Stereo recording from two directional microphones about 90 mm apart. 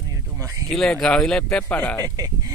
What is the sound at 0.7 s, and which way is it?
Speech, 5° left (ahead or behind).